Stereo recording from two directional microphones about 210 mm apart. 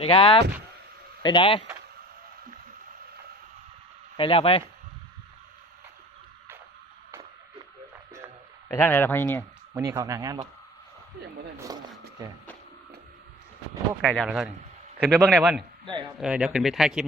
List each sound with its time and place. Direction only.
0.0 s speech: 25° left (ahead or behind)
4.2 s speech: 25° left (ahead or behind)
8.7 s speech: 10° left (ahead or behind)
9.7 s speech: 15° right (ahead or behind)
11.7 s speech: 20° right (ahead or behind)
14.0 s speech: 5° left (ahead or behind)